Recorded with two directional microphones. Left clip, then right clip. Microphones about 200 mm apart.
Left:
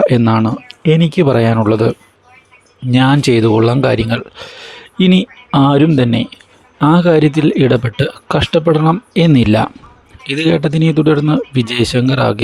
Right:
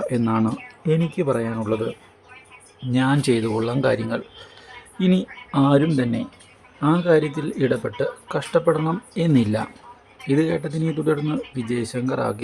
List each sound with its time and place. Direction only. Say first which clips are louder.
0.2 s speech: left 9 dB; 30° left (ahead or behind)